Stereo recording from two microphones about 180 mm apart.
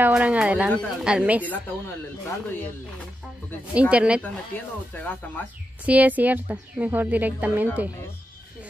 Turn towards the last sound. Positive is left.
turn(degrees=-10)  # may be behind; listen again after turning